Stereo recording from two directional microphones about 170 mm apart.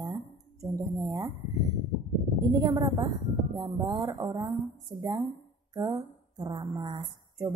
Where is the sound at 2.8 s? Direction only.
20° right (ahead or behind).